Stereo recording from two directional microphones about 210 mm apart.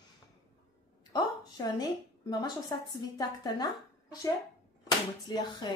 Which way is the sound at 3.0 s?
20° left (ahead or behind).